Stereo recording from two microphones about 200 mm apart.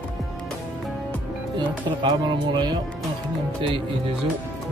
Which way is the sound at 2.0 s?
20° right (ahead or behind).